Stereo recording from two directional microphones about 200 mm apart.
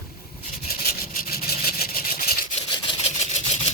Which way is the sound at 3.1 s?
35° left (ahead or behind).